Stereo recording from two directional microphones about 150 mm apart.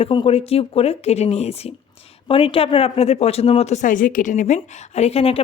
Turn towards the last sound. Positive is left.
turn(degrees=40)  # may be behind; listen again after turning